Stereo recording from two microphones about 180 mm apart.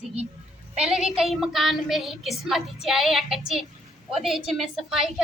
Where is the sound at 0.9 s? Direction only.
Centre (ahead or behind).